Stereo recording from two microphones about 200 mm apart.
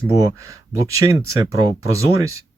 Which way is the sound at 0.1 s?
15° right (ahead or behind).